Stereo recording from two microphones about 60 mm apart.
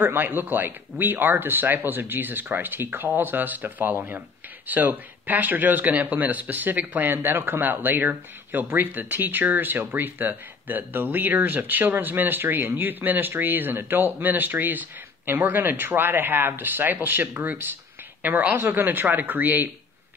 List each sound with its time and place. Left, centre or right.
0.0 s speech: right